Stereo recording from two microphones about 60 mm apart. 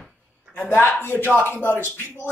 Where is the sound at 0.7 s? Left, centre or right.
Left.